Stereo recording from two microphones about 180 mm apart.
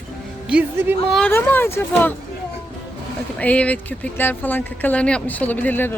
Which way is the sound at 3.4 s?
10° left (ahead or behind).